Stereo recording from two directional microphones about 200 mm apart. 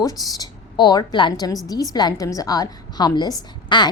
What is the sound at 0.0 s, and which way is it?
A woman's voice, 20° left (ahead or behind).